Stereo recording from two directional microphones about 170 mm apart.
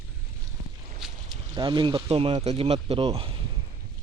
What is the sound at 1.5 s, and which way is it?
Speech, 25° right (ahead or behind).